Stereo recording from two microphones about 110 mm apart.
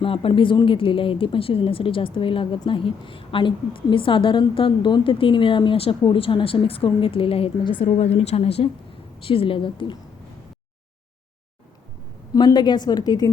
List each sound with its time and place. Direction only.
0.0 s speech: 55° left (ahead or behind)
12.3 s a woman's voice: 35° left (ahead or behind)